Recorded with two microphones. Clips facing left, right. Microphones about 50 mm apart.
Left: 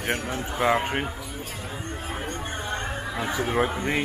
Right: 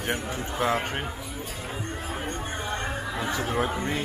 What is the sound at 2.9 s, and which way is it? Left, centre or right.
Speech, centre.